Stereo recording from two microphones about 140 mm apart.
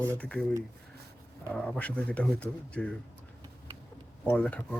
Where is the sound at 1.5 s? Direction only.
5° left (ahead or behind).